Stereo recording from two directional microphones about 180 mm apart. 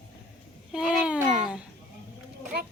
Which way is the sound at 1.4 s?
5° right (ahead or behind).